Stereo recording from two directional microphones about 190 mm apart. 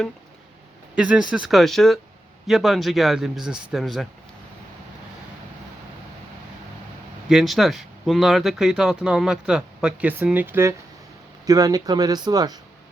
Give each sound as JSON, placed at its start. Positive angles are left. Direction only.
{"t": 0.9, "sound": "speech", "side_deg": -5}
{"t": 7.3, "sound": "speech", "side_deg": 0}